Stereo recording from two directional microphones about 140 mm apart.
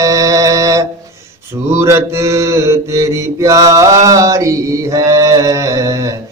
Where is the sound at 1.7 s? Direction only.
20° right (ahead or behind).